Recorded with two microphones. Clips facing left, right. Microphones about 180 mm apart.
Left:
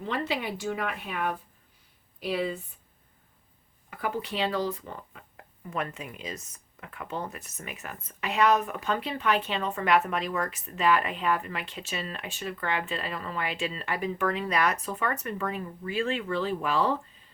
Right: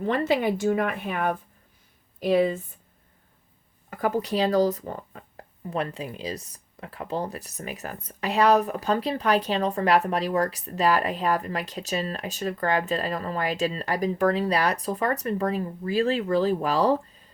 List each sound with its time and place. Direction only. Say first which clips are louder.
0.0 s speech: right 8 dB; 45° right (ahead or behind)
3.8 s speech: right 6 dB; 45° right (ahead or behind)